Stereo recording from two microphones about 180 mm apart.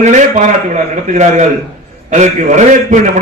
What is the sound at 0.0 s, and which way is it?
A man's voice, 40° right (ahead or behind).